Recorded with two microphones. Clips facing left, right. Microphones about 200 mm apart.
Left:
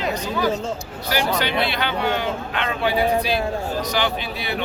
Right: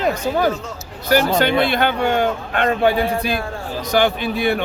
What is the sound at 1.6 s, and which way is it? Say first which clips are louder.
Speech: right 5 dB; 50° right (ahead or behind).